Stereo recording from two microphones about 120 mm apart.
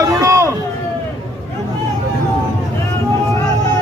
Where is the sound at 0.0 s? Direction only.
25° right (ahead or behind).